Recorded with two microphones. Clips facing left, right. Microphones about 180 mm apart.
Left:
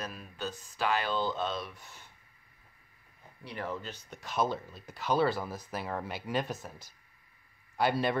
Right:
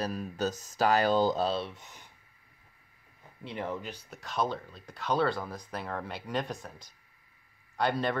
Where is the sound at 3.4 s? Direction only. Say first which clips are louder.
Right 2 dB; 20° right (ahead or behind).